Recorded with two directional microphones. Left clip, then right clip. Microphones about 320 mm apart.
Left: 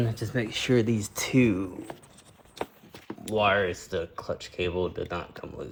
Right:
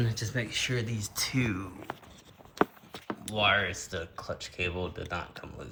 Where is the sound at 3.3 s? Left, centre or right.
Centre.